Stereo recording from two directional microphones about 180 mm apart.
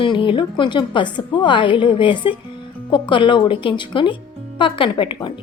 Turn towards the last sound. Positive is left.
turn(degrees=25)  # may be behind; listen again after turning